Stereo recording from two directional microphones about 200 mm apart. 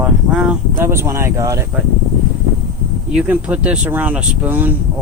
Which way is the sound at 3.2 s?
5° right (ahead or behind).